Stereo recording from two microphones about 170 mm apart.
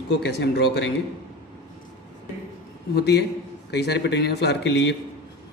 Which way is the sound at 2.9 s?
75° left (ahead or behind).